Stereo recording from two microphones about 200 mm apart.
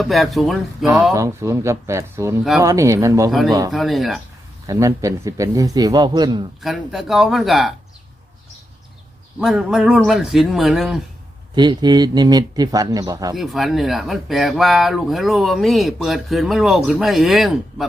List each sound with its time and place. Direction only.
0.0 s speech: centre (ahead or behind)
1.1 s a man's voice: 15° right (ahead or behind)
3.7 s speech: centre (ahead or behind)
4.6 s a man's voice: 15° right (ahead or behind)
6.6 s speech: centre (ahead or behind)
9.4 s speech: 5° right (ahead or behind)
11.5 s speech: 20° right (ahead or behind)
13.3 s speech: centre (ahead or behind)